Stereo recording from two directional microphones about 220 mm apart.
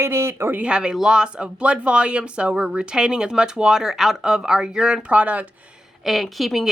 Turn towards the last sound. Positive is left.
turn(degrees=0)  # may be behind; listen again after turning